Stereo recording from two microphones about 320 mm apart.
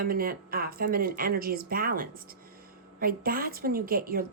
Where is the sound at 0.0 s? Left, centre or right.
Right.